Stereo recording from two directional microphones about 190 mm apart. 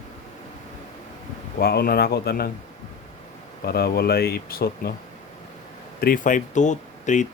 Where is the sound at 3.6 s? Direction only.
55° left (ahead or behind).